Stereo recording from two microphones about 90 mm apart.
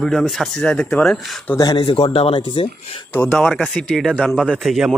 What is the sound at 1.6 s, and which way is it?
Speech, 70° left (ahead or behind).